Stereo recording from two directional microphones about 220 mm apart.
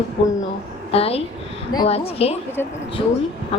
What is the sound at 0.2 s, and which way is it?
A woman's voice, 25° left (ahead or behind).